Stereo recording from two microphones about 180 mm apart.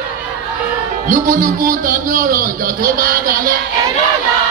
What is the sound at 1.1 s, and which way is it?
Speech, 45° right (ahead or behind).